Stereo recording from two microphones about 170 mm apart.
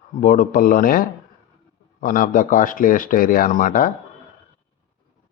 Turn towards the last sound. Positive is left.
turn(degrees=50)  # may be behind; listen again after turning